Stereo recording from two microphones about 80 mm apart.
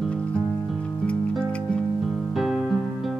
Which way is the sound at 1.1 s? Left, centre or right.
Centre.